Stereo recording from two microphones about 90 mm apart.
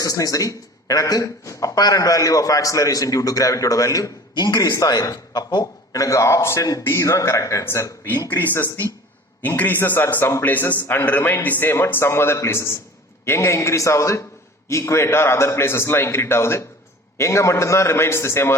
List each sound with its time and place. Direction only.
0.0 s speech: 40° left (ahead or behind)
4.4 s speech: 50° left (ahead or behind)
6.8 s a man's voice: 30° left (ahead or behind)